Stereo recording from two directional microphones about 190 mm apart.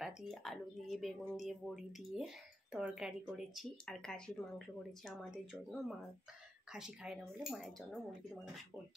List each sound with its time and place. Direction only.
0.0 s speech: centre (ahead or behind)